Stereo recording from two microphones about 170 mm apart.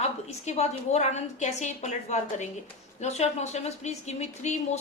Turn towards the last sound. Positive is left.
turn(degrees=40)  # may be behind; listen again after turning